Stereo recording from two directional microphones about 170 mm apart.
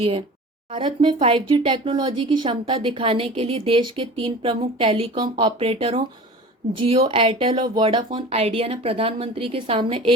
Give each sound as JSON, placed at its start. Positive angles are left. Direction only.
{"t": 0.0, "sound": "speech", "side_deg": -35}